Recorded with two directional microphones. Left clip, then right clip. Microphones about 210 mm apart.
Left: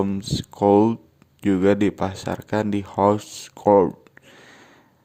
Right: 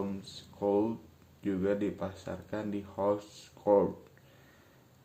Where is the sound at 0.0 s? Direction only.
50° left (ahead or behind).